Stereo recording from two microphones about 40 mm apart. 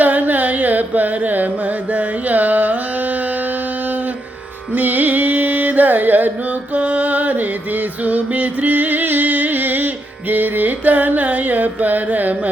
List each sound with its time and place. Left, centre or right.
0.0 s carnatic music: right
4.7 s carnatic music: right
6.7 s music: right